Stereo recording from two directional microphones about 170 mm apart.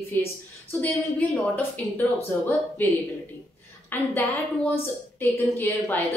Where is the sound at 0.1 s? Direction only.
10° left (ahead or behind).